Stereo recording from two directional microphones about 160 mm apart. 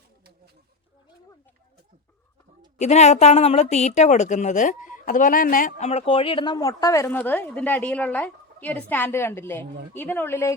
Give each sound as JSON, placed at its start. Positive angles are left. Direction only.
{"t": 2.7, "sound": "a woman's voice", "side_deg": 45}